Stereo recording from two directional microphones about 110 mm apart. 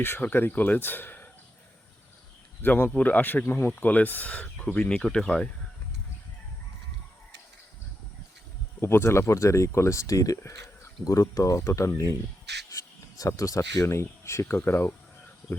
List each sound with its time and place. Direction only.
0.0 s speech: 20° left (ahead or behind)
2.6 s speech: 20° left (ahead or behind)
8.8 s speech: 20° left (ahead or behind)